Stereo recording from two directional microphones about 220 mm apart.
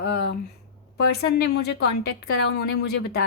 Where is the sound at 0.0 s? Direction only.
50° left (ahead or behind).